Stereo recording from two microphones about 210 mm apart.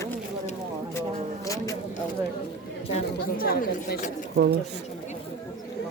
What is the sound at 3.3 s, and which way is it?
Speech, 45° left (ahead or behind).